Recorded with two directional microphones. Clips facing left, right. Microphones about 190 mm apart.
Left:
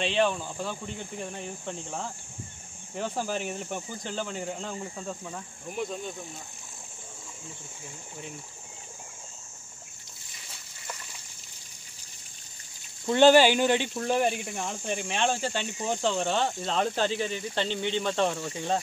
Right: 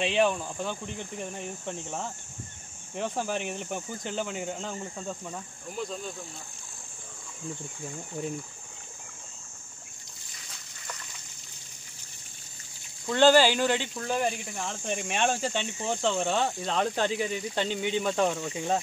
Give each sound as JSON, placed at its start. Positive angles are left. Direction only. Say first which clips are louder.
{"t": 0.0, "sound": "speech", "louder": "right 1 dB", "side_deg": 0}
{"t": 13.0, "sound": "speech", "louder": "left 2 dB", "side_deg": 20}
{"t": 14.3, "sound": "speech", "louder": "left 2 dB", "side_deg": 10}